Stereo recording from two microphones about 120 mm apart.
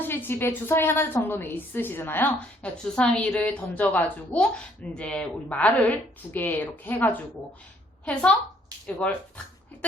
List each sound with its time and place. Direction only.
0.0 s a woman's voice: 20° left (ahead or behind)